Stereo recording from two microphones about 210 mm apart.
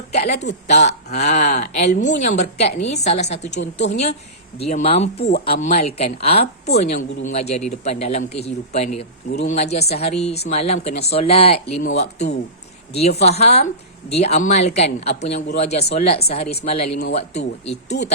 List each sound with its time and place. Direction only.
0.1 s a sound: 30° left (ahead or behind)
1.1 s speech: 35° left (ahead or behind)
3.6 s a woman's voice: 60° left (ahead or behind)
4.5 s speech: 30° left (ahead or behind)